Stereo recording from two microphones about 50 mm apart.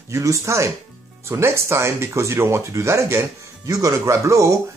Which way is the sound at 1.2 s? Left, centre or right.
Right.